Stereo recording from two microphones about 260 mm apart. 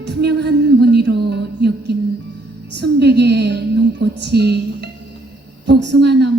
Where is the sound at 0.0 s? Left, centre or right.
Right.